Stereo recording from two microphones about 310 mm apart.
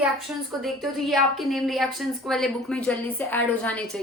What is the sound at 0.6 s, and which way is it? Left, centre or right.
A woman's voice, centre.